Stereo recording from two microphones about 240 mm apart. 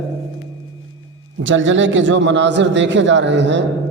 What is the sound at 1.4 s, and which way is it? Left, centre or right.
A man's voice, right.